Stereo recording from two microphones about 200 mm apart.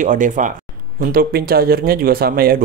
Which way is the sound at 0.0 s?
40° right (ahead or behind).